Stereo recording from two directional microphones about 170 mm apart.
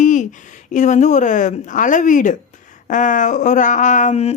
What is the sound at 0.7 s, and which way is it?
Speech, 45° left (ahead or behind).